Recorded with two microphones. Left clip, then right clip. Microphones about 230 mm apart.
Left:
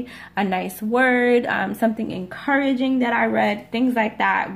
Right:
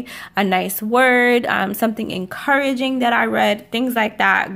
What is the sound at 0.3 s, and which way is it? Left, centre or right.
Speech, right.